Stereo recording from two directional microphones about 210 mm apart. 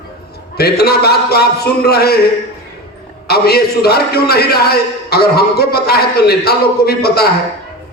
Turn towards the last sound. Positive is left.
turn(degrees=50)  # may be behind; listen again after turning